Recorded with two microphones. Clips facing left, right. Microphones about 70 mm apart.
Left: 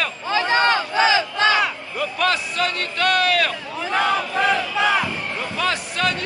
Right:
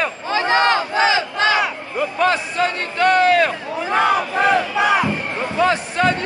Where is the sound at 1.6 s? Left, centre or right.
Right.